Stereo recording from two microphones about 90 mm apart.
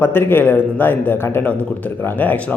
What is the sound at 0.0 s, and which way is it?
Speech, 25° left (ahead or behind).